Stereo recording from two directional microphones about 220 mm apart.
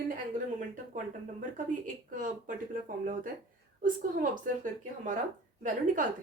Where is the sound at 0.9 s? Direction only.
35° right (ahead or behind).